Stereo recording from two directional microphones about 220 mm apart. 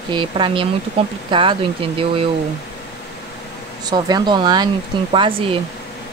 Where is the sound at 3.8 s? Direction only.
20° right (ahead or behind).